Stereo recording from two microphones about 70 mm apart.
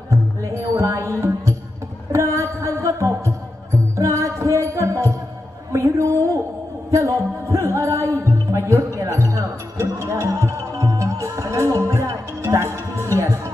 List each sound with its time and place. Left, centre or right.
0.7 s music: right
5.7 s a sound: right
6.9 s music: right